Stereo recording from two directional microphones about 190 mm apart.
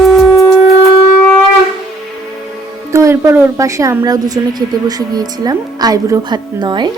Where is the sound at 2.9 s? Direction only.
15° right (ahead or behind).